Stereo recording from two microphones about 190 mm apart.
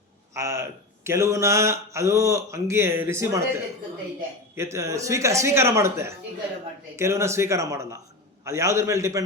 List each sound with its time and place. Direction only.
0.3 s speech: 15° right (ahead or behind)
4.5 s speech: 15° right (ahead or behind)